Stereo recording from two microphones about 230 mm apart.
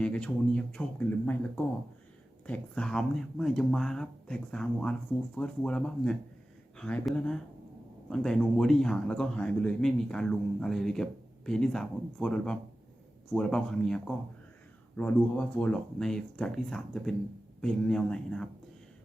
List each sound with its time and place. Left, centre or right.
0.0 s a man's voice: centre